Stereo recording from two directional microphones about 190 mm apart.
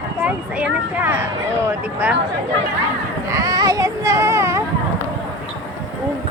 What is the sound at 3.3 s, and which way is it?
Speech, 20° right (ahead or behind).